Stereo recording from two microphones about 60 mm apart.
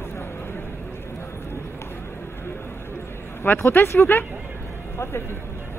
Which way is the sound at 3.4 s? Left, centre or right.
Left.